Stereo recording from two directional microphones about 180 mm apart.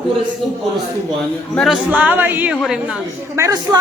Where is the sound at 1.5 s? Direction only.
Centre (ahead or behind).